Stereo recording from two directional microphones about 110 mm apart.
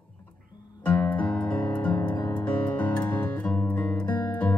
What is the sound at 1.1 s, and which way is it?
Music, 10° left (ahead or behind).